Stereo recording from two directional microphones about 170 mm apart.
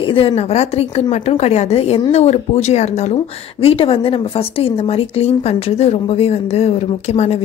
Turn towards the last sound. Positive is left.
turn(degrees=40)  # may be behind; listen again after turning